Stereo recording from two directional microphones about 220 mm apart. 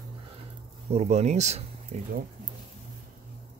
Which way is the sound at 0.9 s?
30° right (ahead or behind).